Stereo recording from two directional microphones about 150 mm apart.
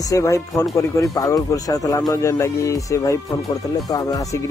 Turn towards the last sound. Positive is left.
turn(degrees=20)  # may be behind; listen again after turning